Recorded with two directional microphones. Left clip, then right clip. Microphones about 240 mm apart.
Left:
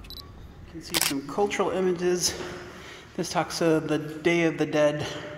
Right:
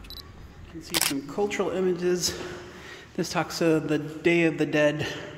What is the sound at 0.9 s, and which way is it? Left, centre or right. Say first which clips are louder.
Speech: even; centre.